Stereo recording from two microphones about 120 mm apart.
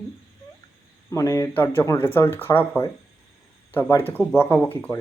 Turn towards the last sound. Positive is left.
turn(degrees=15)  # may be behind; listen again after turning